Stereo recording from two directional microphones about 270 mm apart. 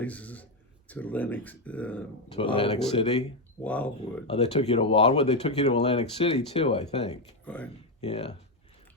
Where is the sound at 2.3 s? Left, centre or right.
Centre.